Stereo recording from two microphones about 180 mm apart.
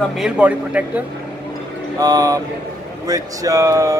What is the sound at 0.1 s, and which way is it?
Speech, 5° right (ahead or behind).